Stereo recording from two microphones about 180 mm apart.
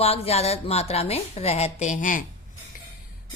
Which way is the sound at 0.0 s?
35° left (ahead or behind).